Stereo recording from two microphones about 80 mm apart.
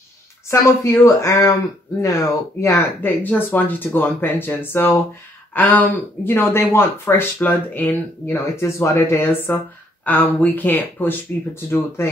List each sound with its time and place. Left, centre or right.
0.5 s speech: left
3.0 s speech: left
12.0 s speech: left